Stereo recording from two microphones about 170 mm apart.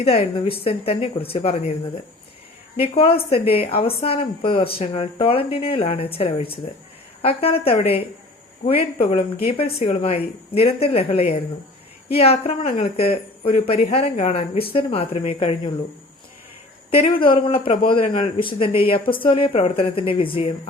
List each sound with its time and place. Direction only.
0.0 s speech: 35° left (ahead or behind)
2.7 s speech: 35° left (ahead or behind)
16.9 s speech: 30° left (ahead or behind)